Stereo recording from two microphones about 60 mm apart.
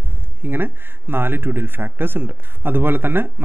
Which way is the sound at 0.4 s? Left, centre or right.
Right.